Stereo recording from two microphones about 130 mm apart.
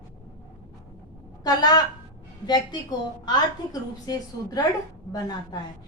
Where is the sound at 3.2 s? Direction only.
30° left (ahead or behind).